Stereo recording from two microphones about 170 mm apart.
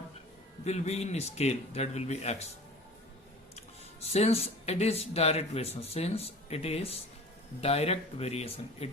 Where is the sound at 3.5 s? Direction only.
40° left (ahead or behind).